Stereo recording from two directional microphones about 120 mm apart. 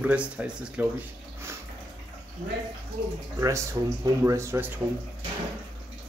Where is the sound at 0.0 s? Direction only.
10° right (ahead or behind).